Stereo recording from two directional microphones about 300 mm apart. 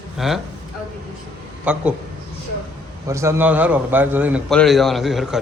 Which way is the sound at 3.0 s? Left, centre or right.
Centre.